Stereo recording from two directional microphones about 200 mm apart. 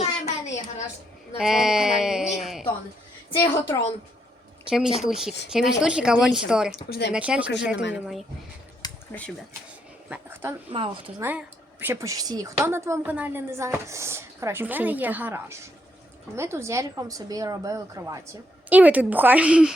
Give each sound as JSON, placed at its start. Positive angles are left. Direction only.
{"t": 0.0, "sound": "a sound", "side_deg": 35}
{"t": 1.4, "sound": "a woman's voice", "side_deg": 0}
{"t": 3.3, "sound": "a woman's voice", "side_deg": 10}
{"t": 4.9, "sound": "a woman's voice", "side_deg": 0}
{"t": 8.8, "sound": "a sound", "side_deg": 20}
{"t": 10.1, "sound": "speech", "side_deg": -10}
{"t": 10.7, "sound": "a woman's voice", "side_deg": -25}
{"t": 11.2, "sound": "speech", "side_deg": -10}